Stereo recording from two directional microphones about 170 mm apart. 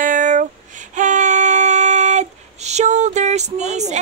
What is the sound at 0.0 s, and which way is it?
Child singing, 50° right (ahead or behind).